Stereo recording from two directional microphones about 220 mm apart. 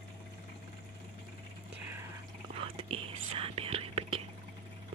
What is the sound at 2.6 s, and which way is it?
Whispering, 25° right (ahead or behind).